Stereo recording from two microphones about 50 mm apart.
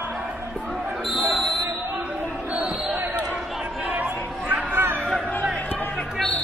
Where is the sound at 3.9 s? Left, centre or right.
Right.